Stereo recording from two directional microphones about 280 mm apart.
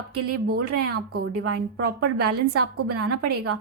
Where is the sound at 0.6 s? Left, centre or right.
Right.